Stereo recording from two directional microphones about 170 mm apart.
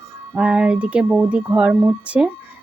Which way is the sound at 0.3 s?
10° right (ahead or behind).